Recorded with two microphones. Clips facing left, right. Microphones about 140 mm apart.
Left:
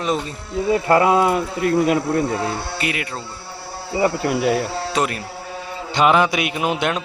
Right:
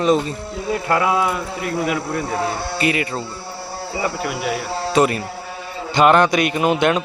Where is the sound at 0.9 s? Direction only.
30° left (ahead or behind).